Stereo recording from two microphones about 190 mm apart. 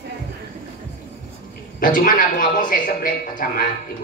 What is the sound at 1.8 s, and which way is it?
A man's voice, 45° left (ahead or behind).